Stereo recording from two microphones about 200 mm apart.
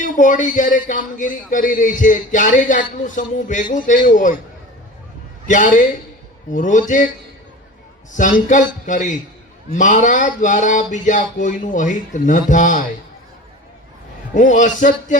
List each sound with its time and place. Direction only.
0.0 s speech: 40° left (ahead or behind)
5.5 s speech: 40° left (ahead or behind)
8.1 s speech: 40° left (ahead or behind)
14.3 s speech: 40° left (ahead or behind)